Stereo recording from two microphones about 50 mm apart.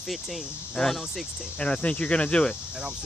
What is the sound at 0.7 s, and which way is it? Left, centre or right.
Speech, centre.